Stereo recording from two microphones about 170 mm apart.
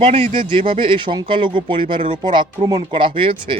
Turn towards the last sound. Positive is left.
turn(degrees=-30)  # may be behind; listen again after turning